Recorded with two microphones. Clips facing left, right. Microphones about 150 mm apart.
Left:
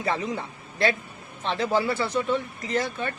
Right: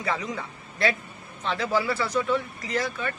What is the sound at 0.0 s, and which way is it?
A man's voice, 25° left (ahead or behind).